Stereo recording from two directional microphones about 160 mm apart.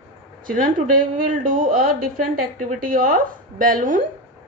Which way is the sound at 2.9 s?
60° right (ahead or behind).